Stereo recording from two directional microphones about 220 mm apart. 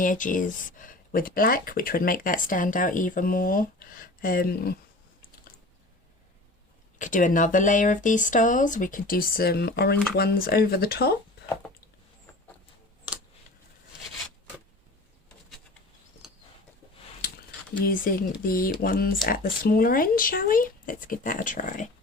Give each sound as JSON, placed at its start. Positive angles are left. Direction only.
{"t": 0.0, "sound": "speech", "side_deg": 35}
{"t": 7.0, "sound": "speech", "side_deg": 35}
{"t": 16.2, "sound": "a sound", "side_deg": 0}
{"t": 17.8, "sound": "speech", "side_deg": 40}